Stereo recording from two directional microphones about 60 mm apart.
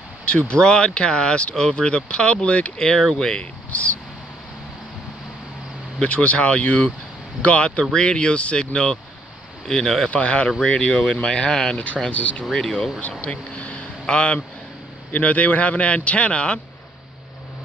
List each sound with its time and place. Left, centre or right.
0.5 s speech: centre
5.9 s a man's voice: left
10.1 s a man's voice: left
12.1 s a man's voice: left
12.5 s speech: centre
13.2 s a sound: left
15.1 s a man's voice: left